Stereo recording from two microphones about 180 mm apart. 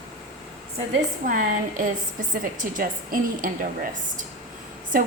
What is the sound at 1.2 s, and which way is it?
A woman's voice, 50° right (ahead or behind).